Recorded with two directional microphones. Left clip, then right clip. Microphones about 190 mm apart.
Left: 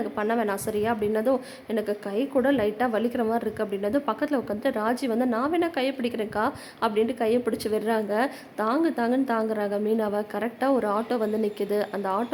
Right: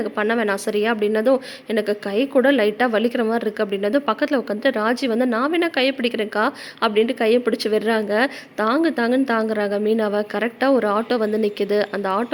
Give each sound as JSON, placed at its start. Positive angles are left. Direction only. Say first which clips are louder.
{"t": 0.0, "sound": "a woman's voice", "louder": "right 5 dB", "side_deg": -20}